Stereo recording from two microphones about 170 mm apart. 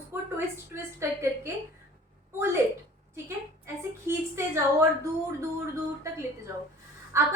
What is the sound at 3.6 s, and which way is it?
A woman's voice, 15° right (ahead or behind).